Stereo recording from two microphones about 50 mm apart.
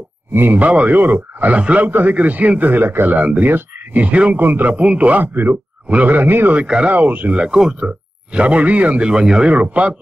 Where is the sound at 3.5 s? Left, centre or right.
Right.